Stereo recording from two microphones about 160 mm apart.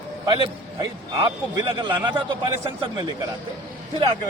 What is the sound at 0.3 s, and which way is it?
A man's voice, 30° right (ahead or behind).